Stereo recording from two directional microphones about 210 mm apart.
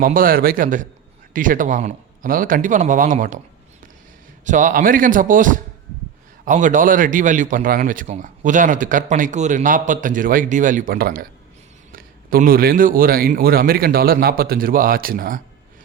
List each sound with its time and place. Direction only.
0.0 s a man's voice: 40° right (ahead or behind)
4.4 s a man's voice: 35° right (ahead or behind)